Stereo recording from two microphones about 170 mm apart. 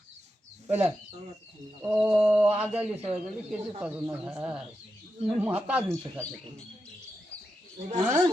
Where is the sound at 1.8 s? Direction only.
25° right (ahead or behind).